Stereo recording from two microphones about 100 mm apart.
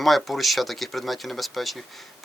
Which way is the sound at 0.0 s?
Centre (ahead or behind).